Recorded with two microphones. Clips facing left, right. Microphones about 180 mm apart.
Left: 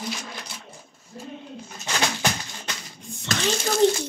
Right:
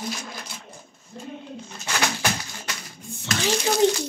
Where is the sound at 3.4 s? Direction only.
10° right (ahead or behind).